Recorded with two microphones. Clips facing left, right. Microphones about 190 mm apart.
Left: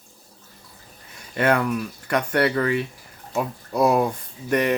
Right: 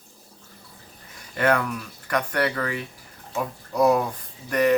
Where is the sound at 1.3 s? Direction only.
20° left (ahead or behind).